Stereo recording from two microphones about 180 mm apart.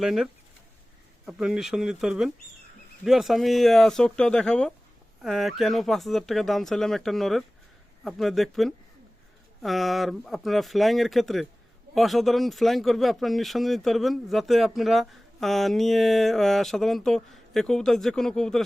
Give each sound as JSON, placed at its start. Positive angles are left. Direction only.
{"t": 0.0, "sound": "speech", "side_deg": -5}